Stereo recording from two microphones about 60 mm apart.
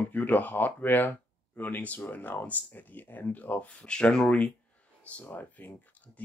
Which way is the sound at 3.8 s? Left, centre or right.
Centre.